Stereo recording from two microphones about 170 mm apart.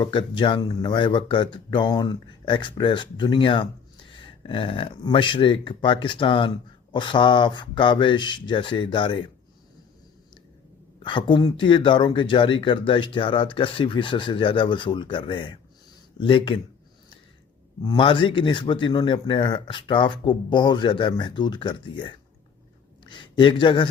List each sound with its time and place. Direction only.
0.0 s speech: 30° left (ahead or behind)
11.0 s speech: 30° left (ahead or behind)
17.8 s speech: 30° left (ahead or behind)